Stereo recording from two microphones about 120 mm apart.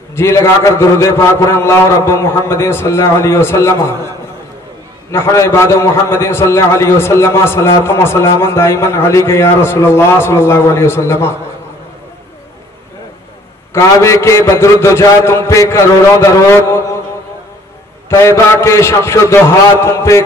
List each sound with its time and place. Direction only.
0.1 s a man's voice: 20° left (ahead or behind)
5.1 s a man's voice: 25° left (ahead or behind)
13.7 s a man's voice: 25° left (ahead or behind)
18.1 s a man's voice: 25° left (ahead or behind)